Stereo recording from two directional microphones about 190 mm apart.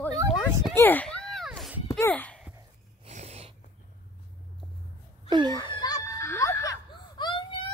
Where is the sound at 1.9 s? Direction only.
10° left (ahead or behind).